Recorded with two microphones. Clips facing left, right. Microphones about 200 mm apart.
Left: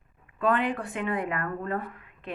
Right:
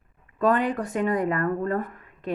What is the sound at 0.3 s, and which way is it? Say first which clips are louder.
Speech: right 4 dB; 40° right (ahead or behind).